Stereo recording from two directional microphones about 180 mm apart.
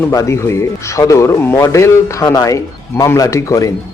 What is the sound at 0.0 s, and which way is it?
Speech, 15° left (ahead or behind).